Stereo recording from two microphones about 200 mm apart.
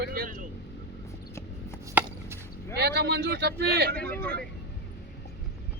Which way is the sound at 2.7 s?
55° right (ahead or behind).